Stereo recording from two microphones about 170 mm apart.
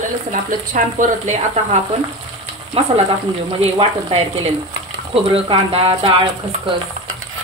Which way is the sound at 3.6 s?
35° right (ahead or behind).